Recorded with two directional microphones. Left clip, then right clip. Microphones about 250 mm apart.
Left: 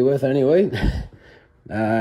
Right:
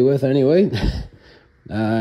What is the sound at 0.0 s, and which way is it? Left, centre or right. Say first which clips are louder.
Speech: right 2 dB; right.